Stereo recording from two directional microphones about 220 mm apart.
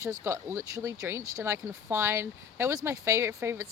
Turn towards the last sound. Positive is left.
turn(degrees=-10)  # may be behind; listen again after turning